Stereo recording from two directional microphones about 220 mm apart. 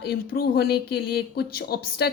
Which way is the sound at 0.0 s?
45° left (ahead or behind).